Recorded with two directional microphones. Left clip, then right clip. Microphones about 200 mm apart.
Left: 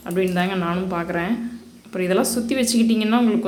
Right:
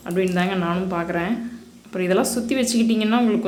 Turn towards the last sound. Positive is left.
turn(degrees=-5)  # may be behind; listen again after turning